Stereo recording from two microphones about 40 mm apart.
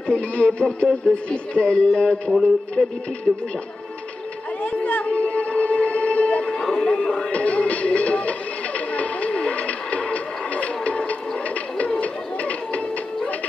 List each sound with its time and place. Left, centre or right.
0.1 s radio: left
1.3 s music: left
2.8 s music: centre
4.6 s music: left
6.5 s music: centre
7.3 s music: left